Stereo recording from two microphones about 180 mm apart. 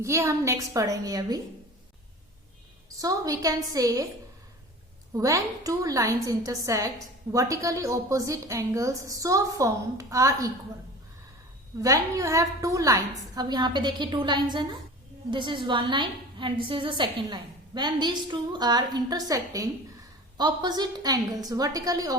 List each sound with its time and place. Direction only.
0.0 s a woman's voice: 15° right (ahead or behind)
3.0 s a woman's voice: 20° right (ahead or behind)
5.1 s a woman's voice: 20° right (ahead or behind)
11.8 s a woman's voice: 20° right (ahead or behind)